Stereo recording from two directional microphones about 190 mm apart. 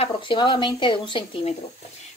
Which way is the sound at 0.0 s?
25° left (ahead or behind).